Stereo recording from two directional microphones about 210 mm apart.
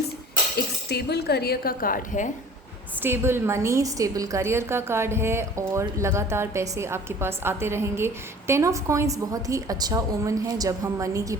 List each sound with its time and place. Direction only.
0.5 s speech: 50° left (ahead or behind)
3.0 s a woman's voice: 10° right (ahead or behind)